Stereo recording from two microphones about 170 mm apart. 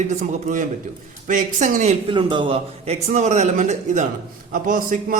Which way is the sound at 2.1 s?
30° right (ahead or behind).